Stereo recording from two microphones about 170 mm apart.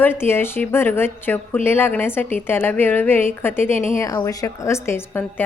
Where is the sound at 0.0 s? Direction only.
15° left (ahead or behind).